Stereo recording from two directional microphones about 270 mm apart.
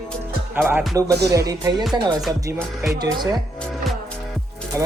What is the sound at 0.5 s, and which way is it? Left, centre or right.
Speech, centre.